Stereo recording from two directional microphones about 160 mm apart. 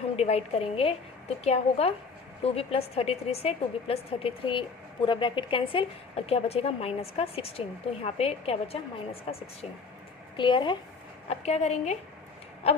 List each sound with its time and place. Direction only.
0.2 s a woman's voice: 40° left (ahead or behind)
10.3 s a woman's voice: 30° left (ahead or behind)
11.3 s a woman's voice: 40° left (ahead or behind)